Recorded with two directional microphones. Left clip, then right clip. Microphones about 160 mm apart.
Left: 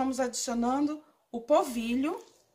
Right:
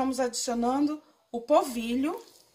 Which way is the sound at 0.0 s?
15° left (ahead or behind).